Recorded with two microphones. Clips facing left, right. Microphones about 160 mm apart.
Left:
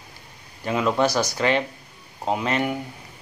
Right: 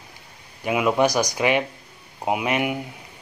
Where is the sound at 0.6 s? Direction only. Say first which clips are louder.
Right 2 dB; 15° right (ahead or behind).